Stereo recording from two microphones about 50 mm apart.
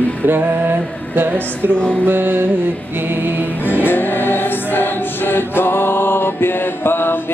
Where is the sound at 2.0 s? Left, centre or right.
Right.